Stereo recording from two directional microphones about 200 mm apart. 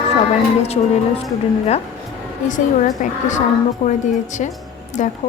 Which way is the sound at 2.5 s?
40° left (ahead or behind).